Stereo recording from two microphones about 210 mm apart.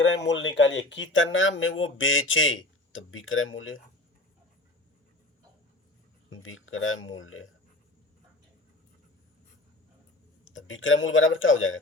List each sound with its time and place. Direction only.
0.0 s speech: 60° left (ahead or behind)
6.3 s speech: 70° left (ahead or behind)
10.4 s speech: 65° left (ahead or behind)